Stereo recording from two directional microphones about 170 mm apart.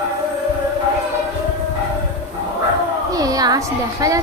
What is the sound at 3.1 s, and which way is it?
A woman's voice, 20° right (ahead or behind).